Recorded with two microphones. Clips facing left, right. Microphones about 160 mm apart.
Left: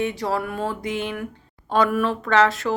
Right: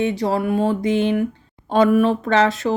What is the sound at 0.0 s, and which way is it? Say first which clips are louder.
Speech: right 4 dB; 25° right (ahead or behind).